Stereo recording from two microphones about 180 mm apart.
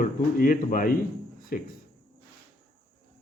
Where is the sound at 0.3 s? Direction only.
50° left (ahead or behind).